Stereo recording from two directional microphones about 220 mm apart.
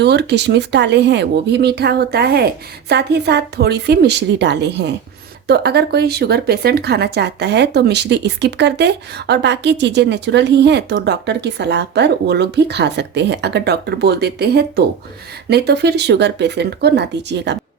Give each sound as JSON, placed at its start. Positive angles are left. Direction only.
{"t": 0.0, "sound": "speech", "side_deg": -50}